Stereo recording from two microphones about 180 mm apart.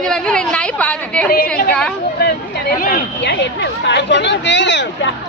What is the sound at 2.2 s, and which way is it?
Speech, 55° left (ahead or behind).